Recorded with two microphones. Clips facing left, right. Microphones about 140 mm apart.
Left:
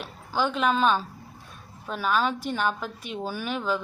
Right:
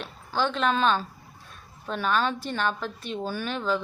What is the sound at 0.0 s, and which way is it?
A woman's voice, 10° left (ahead or behind).